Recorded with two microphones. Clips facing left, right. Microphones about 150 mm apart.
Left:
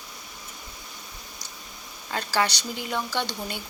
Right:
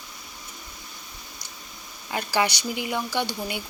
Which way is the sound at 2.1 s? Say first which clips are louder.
Right 1 dB; 15° right (ahead or behind).